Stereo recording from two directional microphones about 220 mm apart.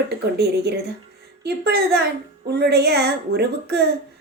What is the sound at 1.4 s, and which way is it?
A woman's voice, 45° right (ahead or behind).